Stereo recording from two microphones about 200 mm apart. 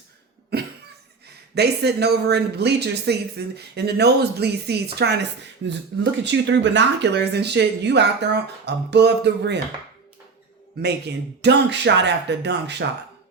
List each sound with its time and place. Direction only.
0.5 s cough: 55° right (ahead or behind)
1.5 s speech: 55° right (ahead or behind)
10.8 s speech: 55° right (ahead or behind)